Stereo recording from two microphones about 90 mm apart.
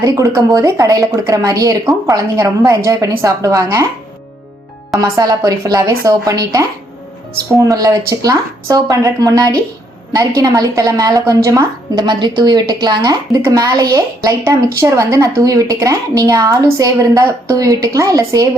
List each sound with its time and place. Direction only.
0.0 s speech: 40° right (ahead or behind)
4.9 s a woman's voice: 45° right (ahead or behind)
11.9 s a woman's voice: 55° right (ahead or behind); by 18.4 s 40° right (ahead or behind)